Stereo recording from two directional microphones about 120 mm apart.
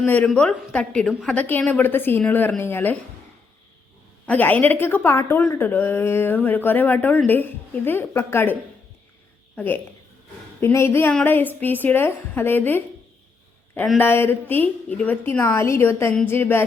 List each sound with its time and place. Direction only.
0.0 s a woman's voice: 15° left (ahead or behind)
4.3 s a woman's voice: 15° left (ahead or behind)
9.6 s a woman's voice: 15° left (ahead or behind)
14.0 s a woman's voice: 20° left (ahead or behind)